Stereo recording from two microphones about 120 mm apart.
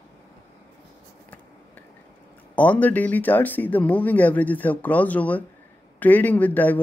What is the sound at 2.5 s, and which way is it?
Speech, 15° left (ahead or behind).